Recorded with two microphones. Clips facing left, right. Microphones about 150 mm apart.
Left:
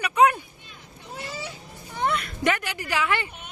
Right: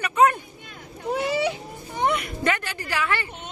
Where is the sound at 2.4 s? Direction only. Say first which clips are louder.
Even; 15° left (ahead or behind).